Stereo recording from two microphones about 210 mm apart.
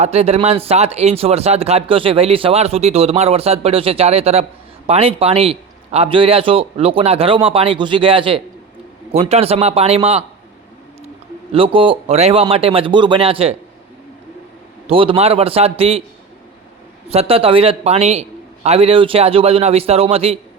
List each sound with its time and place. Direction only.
0.0 s speech: 30° right (ahead or behind)
11.5 s speech: 25° right (ahead or behind)
14.8 s speech: 25° right (ahead or behind)
17.1 s speech: 30° right (ahead or behind)